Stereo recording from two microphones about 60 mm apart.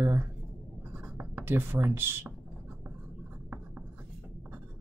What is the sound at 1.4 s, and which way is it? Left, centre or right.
Speech, right.